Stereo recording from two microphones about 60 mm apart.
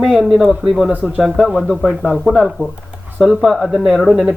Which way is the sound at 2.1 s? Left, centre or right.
Centre.